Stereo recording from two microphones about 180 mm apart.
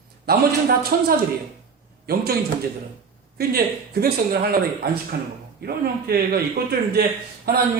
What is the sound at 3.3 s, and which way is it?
Speech, 55° right (ahead or behind).